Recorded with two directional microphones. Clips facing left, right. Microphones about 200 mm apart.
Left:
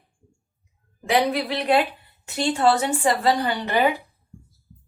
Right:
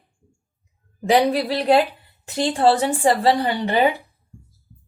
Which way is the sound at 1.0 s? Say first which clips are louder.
Right 4 dB; 35° right (ahead or behind).